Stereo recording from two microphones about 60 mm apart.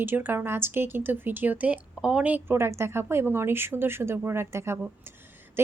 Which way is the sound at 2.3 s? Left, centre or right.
Right.